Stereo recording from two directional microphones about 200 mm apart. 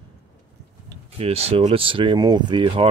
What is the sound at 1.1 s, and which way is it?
Speech, 30° right (ahead or behind).